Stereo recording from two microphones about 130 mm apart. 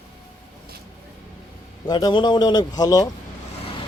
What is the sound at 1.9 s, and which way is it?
A man's voice, 35° left (ahead or behind).